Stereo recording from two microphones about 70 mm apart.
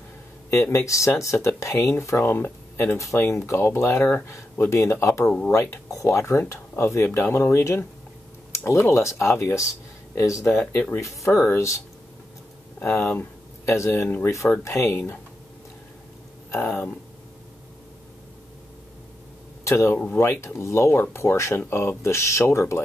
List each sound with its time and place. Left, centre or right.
0.5 s speech: left
2.3 s speech: left
3.0 s speech: left
5.2 s speech: centre
5.5 s speech: left
10.6 s speech: centre
11.0 s speech: left
12.7 s speech: left
13.7 s speech: left
19.6 s speech: left